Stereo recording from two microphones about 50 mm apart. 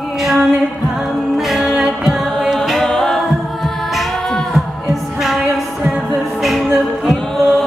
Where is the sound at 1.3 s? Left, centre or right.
Centre.